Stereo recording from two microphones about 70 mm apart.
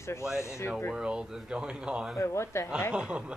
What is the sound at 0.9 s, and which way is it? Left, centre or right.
Speech, centre.